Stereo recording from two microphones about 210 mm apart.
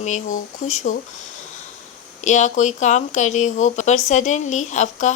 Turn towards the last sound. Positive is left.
turn(degrees=35)  # may be behind; listen again after turning